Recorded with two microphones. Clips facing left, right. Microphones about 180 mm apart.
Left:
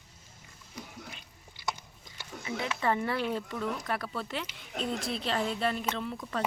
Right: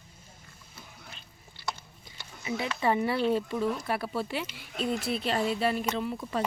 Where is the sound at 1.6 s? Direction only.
15° left (ahead or behind).